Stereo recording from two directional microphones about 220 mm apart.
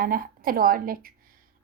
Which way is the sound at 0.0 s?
40° right (ahead or behind).